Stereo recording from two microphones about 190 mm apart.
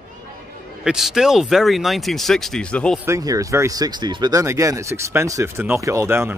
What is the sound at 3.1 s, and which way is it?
Speech, 20° right (ahead or behind).